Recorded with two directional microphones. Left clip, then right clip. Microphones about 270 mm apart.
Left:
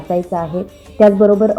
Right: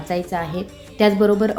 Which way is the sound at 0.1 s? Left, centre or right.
Centre.